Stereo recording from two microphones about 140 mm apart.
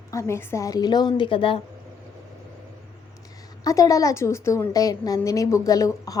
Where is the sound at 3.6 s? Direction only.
25° left (ahead or behind).